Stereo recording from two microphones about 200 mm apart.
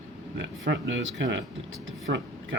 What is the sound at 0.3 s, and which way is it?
Speech, 65° right (ahead or behind).